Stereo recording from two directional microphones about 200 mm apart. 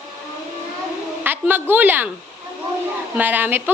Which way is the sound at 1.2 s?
10° right (ahead or behind).